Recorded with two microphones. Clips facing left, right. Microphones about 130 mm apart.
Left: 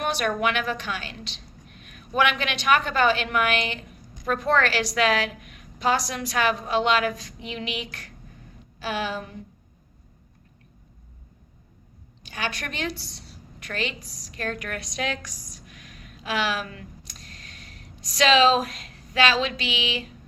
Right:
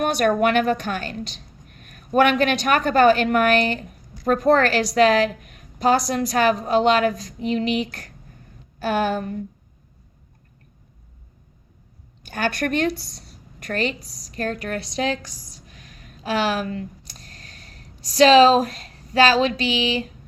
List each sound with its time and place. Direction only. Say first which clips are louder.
0.0 s a woman's voice: right 6 dB; 45° right (ahead or behind)
12.2 s a woman's voice: right 8 dB; 50° right (ahead or behind)